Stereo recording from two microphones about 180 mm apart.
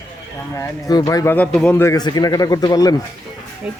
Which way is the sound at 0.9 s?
20° left (ahead or behind).